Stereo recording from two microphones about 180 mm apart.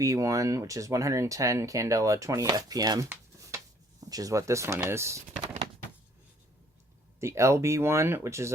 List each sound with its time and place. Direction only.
0.0 s speech: 20° right (ahead or behind)
7.2 s speech: 15° right (ahead or behind)